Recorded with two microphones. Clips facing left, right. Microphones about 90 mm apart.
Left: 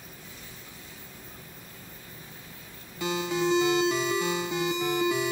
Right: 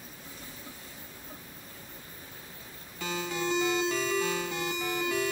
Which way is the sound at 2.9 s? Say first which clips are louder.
Left 5 dB; 15° left (ahead or behind).